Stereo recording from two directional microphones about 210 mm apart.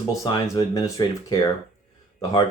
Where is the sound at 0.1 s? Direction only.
15° left (ahead or behind).